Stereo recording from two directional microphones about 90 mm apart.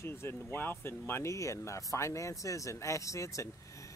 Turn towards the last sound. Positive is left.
turn(degrees=35)  # may be behind; listen again after turning